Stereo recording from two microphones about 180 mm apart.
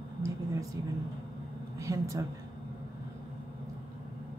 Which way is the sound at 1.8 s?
15° right (ahead or behind).